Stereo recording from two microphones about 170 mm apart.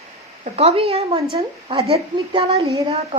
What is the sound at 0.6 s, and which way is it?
Speech, 35° right (ahead or behind).